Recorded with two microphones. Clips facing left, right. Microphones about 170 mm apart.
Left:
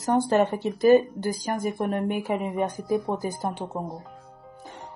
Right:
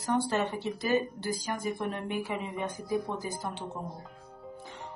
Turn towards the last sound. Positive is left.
turn(degrees=45)  # may be behind; listen again after turning